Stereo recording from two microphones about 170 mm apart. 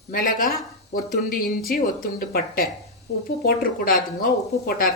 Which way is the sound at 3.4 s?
60° left (ahead or behind).